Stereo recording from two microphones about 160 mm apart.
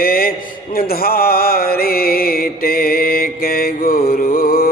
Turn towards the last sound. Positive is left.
turn(degrees=65)  # may be behind; listen again after turning